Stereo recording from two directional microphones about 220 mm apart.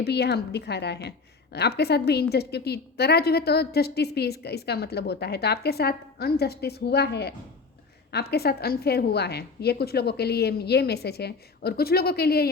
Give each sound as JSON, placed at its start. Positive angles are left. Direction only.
{"t": 0.0, "sound": "a woman's voice", "side_deg": 50}